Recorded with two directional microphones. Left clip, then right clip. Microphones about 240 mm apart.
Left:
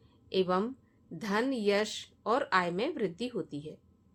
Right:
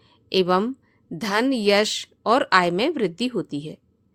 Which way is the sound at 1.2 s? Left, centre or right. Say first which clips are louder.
Right 9 dB; right.